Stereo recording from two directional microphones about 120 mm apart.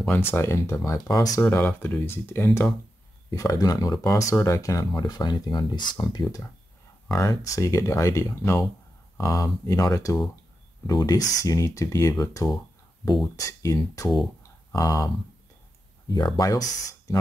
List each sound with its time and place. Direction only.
0.2 s speech: 20° left (ahead or behind)
1.4 s speech: 15° left (ahead or behind); by 6.2 s 35° left (ahead or behind)
7.1 s speech: 25° left (ahead or behind)
16.1 s speech: 35° left (ahead or behind)